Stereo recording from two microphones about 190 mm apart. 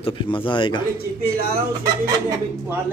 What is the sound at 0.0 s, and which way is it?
Speech, 25° left (ahead or behind).